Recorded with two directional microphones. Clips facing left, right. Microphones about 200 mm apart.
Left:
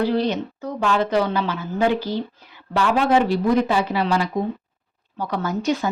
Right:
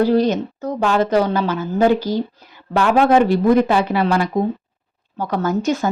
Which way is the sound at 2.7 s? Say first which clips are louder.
Right 4 dB; 50° right (ahead or behind).